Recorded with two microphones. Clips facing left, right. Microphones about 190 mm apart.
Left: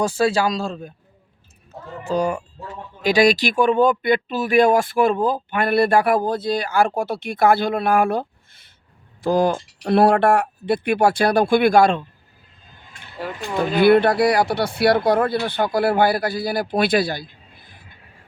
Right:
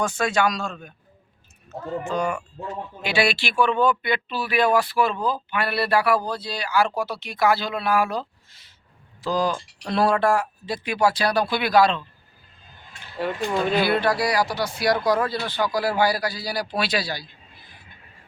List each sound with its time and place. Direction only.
0.0 s speech: 35° left (ahead or behind)
2.0 s speech: 35° left (ahead or behind); by 12.0 s 50° left (ahead or behind)
13.1 s speech: centre (ahead or behind)
13.7 s speech: 55° left (ahead or behind)